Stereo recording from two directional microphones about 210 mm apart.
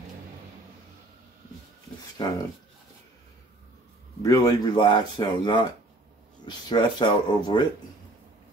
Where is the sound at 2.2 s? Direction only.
20° left (ahead or behind).